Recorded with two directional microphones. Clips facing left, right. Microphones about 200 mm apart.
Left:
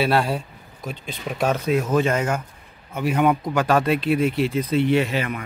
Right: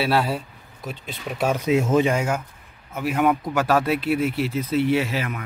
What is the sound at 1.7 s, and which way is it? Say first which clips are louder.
Speech: right 3 dB; 25° right (ahead or behind).